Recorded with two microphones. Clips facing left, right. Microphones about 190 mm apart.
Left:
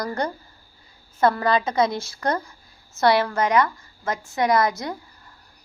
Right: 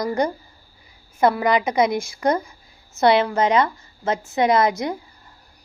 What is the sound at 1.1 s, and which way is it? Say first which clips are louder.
A woman's voice: right 2 dB; 15° right (ahead or behind).